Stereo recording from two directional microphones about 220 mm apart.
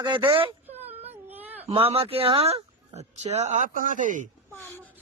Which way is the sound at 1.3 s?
10° right (ahead or behind).